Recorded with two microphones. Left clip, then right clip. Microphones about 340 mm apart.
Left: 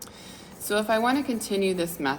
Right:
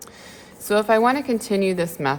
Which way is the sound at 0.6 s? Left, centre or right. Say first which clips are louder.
Right 6 dB; right.